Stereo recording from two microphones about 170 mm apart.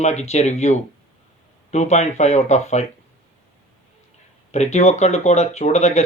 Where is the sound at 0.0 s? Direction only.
40° left (ahead or behind).